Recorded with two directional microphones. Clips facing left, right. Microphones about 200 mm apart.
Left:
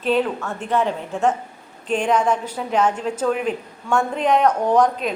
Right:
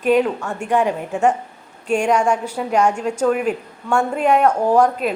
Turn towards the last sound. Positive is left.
turn(degrees=-5)  # may be behind; listen again after turning